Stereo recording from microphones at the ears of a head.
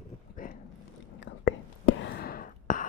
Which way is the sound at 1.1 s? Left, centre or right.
Left.